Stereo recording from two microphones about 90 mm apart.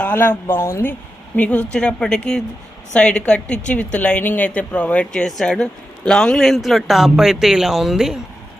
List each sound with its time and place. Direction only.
0.0 s speech: 20° left (ahead or behind)
1.4 s a woman's voice: 15° left (ahead or behind); by 8.2 s 5° right (ahead or behind)